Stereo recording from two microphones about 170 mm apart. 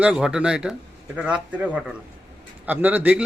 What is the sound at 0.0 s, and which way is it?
A man's voice, 5° right (ahead or behind).